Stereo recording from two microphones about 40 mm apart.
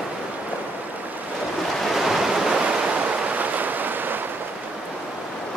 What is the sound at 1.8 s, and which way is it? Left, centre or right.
Waves, centre.